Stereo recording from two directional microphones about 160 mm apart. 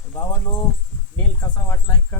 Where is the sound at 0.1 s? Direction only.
25° left (ahead or behind).